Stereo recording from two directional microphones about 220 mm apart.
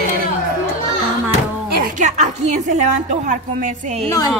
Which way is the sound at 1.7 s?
40° right (ahead or behind).